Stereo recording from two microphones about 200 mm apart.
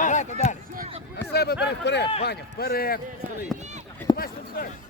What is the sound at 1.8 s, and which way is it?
Speech, 60° left (ahead or behind).